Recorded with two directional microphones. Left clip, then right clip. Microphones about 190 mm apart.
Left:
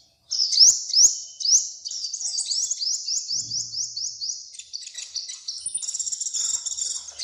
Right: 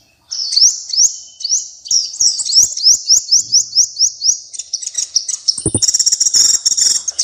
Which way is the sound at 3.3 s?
30° right (ahead or behind).